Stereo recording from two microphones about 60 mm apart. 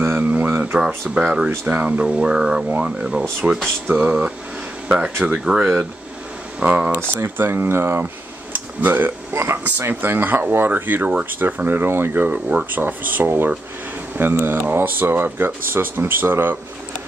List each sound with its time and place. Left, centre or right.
0.2 s a sound: right
0.7 s speech: centre
3.8 s speech: right
9.3 s speech: right